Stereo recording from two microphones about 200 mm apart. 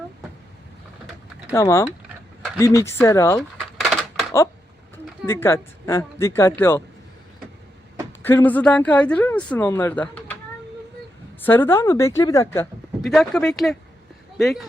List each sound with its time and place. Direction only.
1.5 s speech: 15° left (ahead or behind)
3.8 s a sound: centre (ahead or behind)
5.2 s speech: 10° left (ahead or behind)
8.2 s speech: 10° left (ahead or behind)
11.4 s speech: 10° left (ahead or behind)
13.0 s speech: centre (ahead or behind)